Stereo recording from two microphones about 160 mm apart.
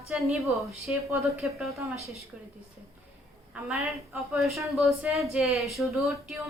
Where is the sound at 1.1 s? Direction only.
15° right (ahead or behind).